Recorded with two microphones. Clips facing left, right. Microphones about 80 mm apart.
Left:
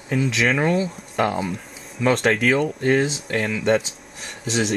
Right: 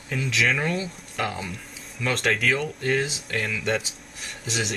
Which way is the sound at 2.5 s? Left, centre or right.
Left.